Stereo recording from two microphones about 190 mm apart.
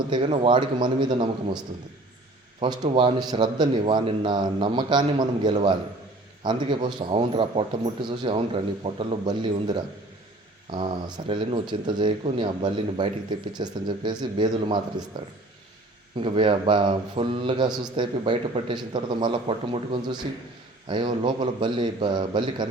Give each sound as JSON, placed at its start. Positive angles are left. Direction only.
{"t": 0.1, "sound": "a man's voice", "side_deg": -25}
{"t": 16.1, "sound": "a man's voice", "side_deg": -30}